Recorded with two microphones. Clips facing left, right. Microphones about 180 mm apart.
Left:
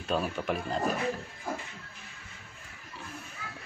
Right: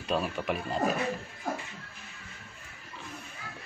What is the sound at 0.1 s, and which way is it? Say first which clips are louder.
Speech: even; centre (ahead or behind).